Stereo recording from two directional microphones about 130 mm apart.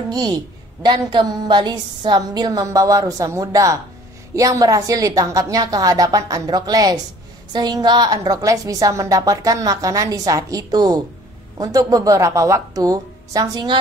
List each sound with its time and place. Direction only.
0.8 s a woman's voice: 35° right (ahead or behind)